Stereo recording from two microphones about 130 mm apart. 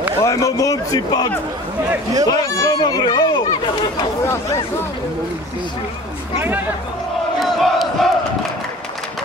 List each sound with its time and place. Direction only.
0.2 s a man's voice: 25° left (ahead or behind)
4.3 s a man's voice: 20° left (ahead or behind)
7.3 s crowd: centre (ahead or behind)